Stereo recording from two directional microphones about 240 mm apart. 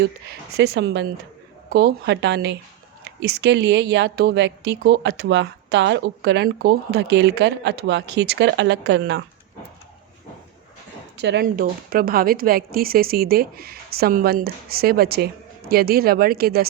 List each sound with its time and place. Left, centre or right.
0.3 s speech: right
11.2 s a woman's voice: right